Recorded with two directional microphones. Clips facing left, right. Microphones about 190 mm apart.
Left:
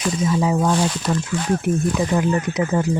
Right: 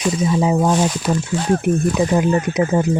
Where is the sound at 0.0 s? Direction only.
20° right (ahead or behind).